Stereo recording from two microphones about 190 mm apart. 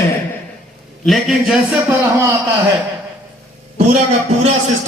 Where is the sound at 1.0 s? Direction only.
Centre (ahead or behind).